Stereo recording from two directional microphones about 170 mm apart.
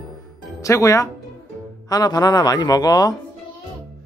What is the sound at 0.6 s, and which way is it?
Speech, 20° left (ahead or behind).